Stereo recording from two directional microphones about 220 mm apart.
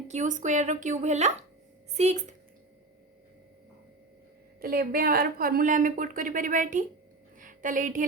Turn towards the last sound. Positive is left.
turn(degrees=-35)  # may be behind; listen again after turning